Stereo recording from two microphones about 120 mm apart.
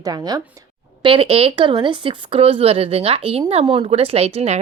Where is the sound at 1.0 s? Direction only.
50° right (ahead or behind).